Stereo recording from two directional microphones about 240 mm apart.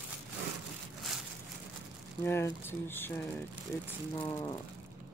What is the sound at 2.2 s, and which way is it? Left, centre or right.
Speech, centre.